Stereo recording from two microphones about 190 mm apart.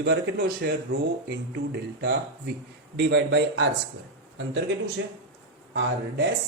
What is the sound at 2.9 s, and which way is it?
Speech, 70° right (ahead or behind).